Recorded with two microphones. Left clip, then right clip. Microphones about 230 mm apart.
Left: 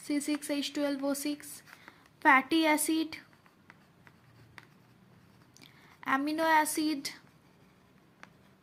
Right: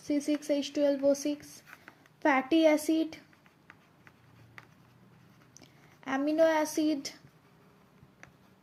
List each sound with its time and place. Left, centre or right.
0.1 s speech: left
5.5 s a woman's voice: left